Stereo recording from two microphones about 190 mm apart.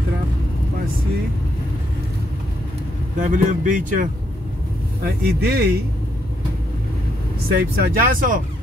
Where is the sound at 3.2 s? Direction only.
45° right (ahead or behind).